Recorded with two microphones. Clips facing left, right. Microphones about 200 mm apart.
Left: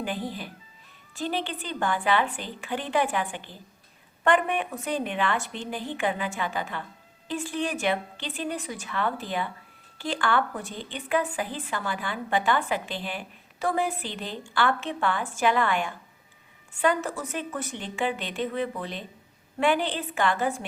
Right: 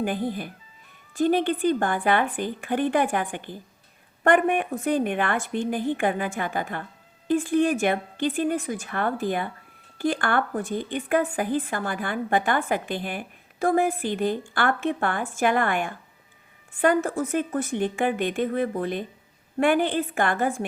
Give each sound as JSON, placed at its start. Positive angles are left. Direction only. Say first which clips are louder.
{"t": 0.0, "sound": "a woman's voice", "louder": "right 5 dB", "side_deg": -50}